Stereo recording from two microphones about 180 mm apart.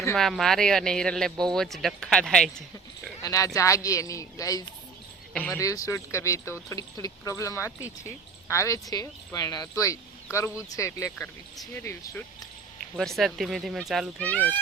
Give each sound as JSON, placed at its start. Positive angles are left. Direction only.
{"t": 0.2, "sound": "speech", "side_deg": 0}
{"t": 3.2, "sound": "speech", "side_deg": 20}
{"t": 13.0, "sound": "speech", "side_deg": 0}